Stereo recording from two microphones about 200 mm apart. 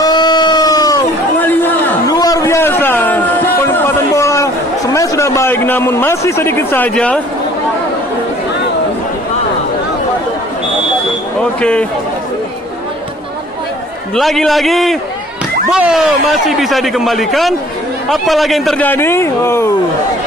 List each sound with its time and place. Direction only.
0.0 s a sound: 20° left (ahead or behind)
4.9 s a man's voice: 15° left (ahead or behind)
14.1 s a man's voice: centre (ahead or behind)